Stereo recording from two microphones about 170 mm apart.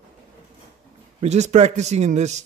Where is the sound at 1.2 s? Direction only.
40° right (ahead or behind).